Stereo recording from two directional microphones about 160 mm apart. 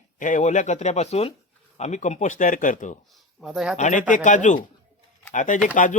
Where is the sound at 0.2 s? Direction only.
55° left (ahead or behind).